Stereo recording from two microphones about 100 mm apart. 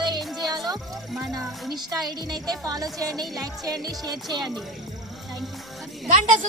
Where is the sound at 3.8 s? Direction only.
40° right (ahead or behind).